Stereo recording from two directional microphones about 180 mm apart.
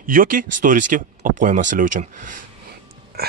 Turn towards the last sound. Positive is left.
turn(degrees=-60)  # may be behind; listen again after turning